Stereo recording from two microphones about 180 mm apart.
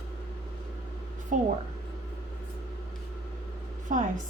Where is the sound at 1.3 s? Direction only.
45° right (ahead or behind).